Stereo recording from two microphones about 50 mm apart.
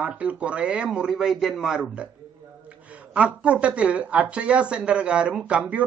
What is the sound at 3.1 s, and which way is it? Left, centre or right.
Speech, right.